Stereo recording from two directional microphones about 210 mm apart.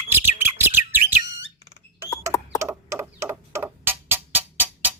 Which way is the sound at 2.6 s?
15° right (ahead or behind).